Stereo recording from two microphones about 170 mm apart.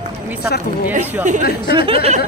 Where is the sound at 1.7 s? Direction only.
30° right (ahead or behind).